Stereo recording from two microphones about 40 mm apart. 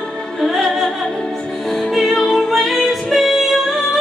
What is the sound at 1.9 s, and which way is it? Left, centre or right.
Music, centre.